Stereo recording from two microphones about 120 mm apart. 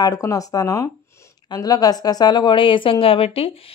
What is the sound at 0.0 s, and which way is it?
Speech, 30° left (ahead or behind).